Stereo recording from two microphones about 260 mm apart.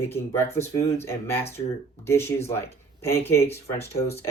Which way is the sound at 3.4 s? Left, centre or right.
Left.